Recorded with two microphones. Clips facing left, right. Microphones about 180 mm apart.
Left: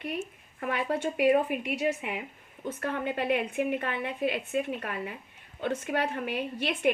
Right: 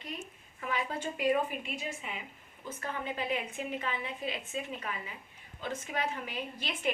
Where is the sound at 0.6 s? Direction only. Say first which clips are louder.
Left 6 dB; 65° left (ahead or behind).